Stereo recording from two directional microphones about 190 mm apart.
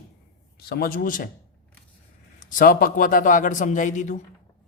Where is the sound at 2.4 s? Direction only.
45° left (ahead or behind).